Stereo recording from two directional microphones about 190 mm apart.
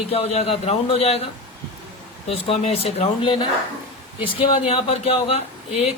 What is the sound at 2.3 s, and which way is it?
A man's voice, 30° left (ahead or behind).